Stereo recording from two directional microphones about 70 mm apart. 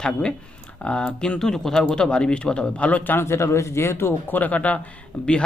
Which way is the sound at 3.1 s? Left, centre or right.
Left.